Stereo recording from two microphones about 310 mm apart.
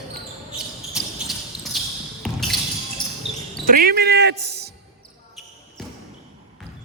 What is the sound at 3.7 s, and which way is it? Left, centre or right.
Speech, right.